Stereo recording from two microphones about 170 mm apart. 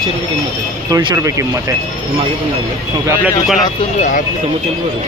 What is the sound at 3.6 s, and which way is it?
Speech, 50° left (ahead or behind).